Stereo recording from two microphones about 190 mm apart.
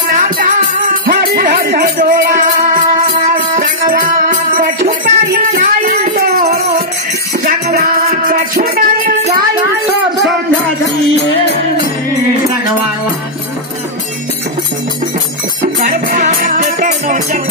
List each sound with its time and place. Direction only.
0.8 s music: 50° right (ahead or behind)
15.9 s music: 40° right (ahead or behind)